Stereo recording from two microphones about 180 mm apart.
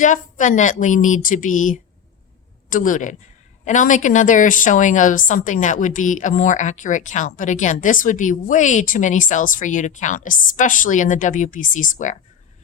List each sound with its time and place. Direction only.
0.0 s a woman's voice: 45° left (ahead or behind)